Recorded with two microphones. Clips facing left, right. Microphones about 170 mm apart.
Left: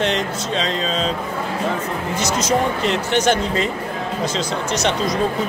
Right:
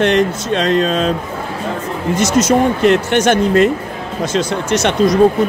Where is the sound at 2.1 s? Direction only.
55° right (ahead or behind).